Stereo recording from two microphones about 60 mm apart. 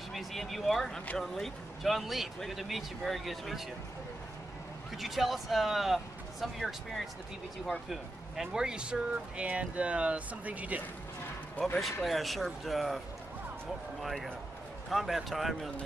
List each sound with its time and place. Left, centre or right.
0.1 s speech: centre
4.9 s speech: centre; by 10.8 s right
11.6 s speech: left
12.0 s speech: centre
14.0 s speech: centre